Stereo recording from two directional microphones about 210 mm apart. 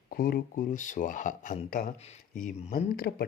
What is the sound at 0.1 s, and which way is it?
Speech, 45° left (ahead or behind).